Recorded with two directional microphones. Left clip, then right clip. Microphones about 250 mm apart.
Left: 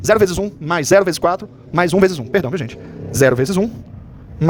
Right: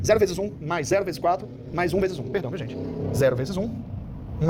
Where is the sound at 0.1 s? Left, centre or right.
Left.